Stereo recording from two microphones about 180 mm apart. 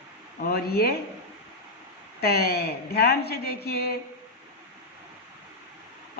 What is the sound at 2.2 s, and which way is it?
Speech, 60° left (ahead or behind).